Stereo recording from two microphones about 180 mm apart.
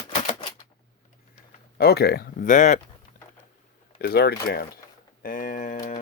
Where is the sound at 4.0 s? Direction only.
60° left (ahead or behind).